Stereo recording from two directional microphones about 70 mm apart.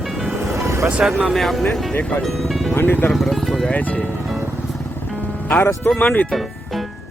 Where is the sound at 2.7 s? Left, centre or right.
Left.